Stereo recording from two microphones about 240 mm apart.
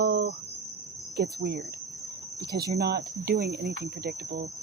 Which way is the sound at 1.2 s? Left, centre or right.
Right.